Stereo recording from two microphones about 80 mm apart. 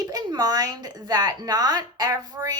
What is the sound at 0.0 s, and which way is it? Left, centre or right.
Speech, right.